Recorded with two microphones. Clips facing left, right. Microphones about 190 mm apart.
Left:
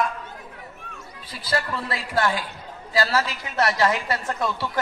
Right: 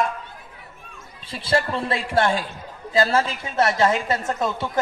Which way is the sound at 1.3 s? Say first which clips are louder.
Right 5 dB; 25° right (ahead or behind).